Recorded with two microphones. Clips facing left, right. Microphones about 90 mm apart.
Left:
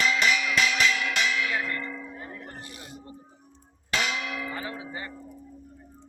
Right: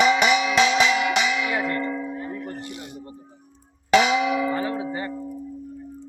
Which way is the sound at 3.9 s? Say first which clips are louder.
Right 12 dB; 90° right.